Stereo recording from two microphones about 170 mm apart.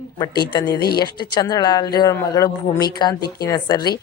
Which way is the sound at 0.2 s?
25° left (ahead or behind).